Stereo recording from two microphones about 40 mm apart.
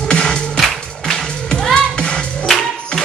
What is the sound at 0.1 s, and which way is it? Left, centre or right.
Music, left.